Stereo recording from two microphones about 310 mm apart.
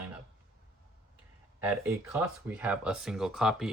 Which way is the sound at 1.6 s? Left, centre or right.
Centre.